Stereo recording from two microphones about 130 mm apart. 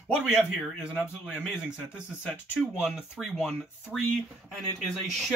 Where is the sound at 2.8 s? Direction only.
5° right (ahead or behind).